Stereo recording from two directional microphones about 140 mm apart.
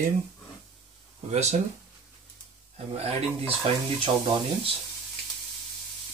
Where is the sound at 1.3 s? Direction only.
55° right (ahead or behind).